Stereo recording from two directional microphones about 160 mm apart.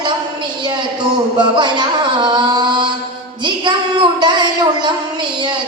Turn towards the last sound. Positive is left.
turn(degrees=-30)  # may be behind; listen again after turning